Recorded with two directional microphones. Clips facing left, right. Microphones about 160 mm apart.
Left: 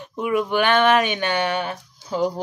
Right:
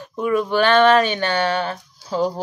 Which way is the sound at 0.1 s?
15° left (ahead or behind).